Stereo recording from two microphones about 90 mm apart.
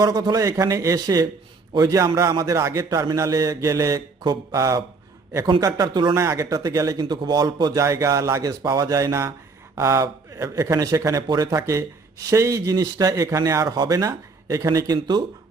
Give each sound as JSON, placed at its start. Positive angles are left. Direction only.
{"t": 0.0, "sound": "a man's voice", "side_deg": -45}
{"t": 5.7, "sound": "speech", "side_deg": -55}
{"t": 6.1, "sound": "speech", "side_deg": -35}
{"t": 7.0, "sound": "speech", "side_deg": -55}
{"t": 15.0, "sound": "speech", "side_deg": -60}